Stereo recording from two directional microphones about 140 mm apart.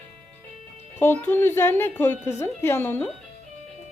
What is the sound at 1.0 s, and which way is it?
A woman's voice, 15° left (ahead or behind).